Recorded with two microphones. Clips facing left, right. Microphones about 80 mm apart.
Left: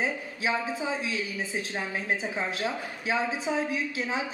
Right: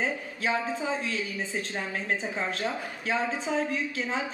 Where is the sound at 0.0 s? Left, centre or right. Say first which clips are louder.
Even; centre.